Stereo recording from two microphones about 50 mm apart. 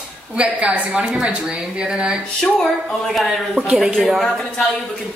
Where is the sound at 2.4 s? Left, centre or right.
Centre.